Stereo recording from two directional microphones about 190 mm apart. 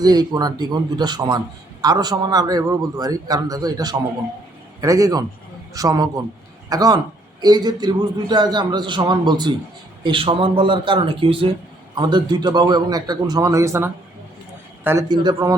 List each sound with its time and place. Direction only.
0.0 s a man's voice: 20° right (ahead or behind)